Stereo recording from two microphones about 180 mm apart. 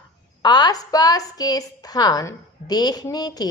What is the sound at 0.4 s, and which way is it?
A woman's voice, 25° left (ahead or behind).